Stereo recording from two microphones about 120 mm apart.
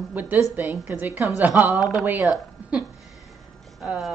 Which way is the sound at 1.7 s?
Centre (ahead or behind).